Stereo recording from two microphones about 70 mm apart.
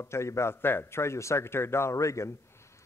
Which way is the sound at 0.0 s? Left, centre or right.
Left.